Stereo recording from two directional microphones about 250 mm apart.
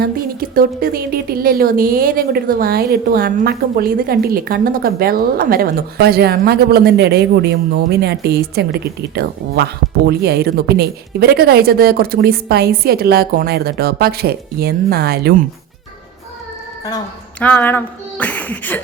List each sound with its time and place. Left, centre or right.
0.0 s a woman's voice: right
17.4 s speech: centre